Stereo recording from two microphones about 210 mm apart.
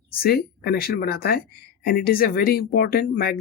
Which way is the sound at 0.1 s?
45° left (ahead or behind).